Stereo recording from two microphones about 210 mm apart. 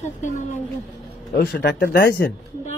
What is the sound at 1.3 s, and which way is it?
Speech, 50° left (ahead or behind).